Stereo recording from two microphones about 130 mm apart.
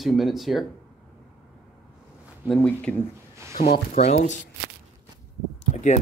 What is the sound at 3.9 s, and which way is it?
Speech, 65° left (ahead or behind).